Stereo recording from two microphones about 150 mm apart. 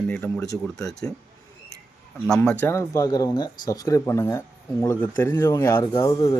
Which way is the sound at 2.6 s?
15° left (ahead or behind).